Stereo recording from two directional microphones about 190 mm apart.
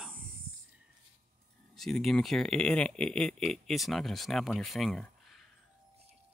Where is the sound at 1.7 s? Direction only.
Centre (ahead or behind).